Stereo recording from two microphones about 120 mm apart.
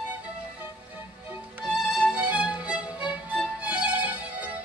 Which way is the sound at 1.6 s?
5° right (ahead or behind).